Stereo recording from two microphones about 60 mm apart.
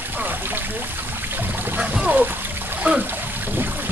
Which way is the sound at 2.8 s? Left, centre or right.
Right.